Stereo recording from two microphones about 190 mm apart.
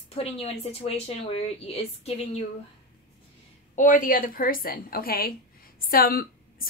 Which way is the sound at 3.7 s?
40° left (ahead or behind).